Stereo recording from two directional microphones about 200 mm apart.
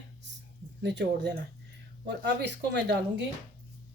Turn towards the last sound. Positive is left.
turn(degrees=-55)  # may be behind; listen again after turning